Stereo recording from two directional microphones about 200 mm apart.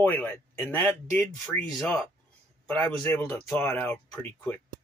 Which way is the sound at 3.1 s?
10° left (ahead or behind).